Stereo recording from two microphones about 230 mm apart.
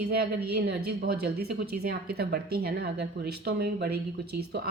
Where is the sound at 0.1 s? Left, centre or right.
Right.